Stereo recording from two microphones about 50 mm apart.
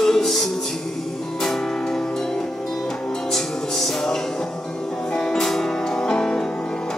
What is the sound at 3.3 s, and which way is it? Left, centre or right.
Music, centre.